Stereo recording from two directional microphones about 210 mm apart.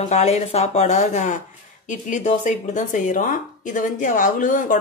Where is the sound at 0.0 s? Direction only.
30° left (ahead or behind).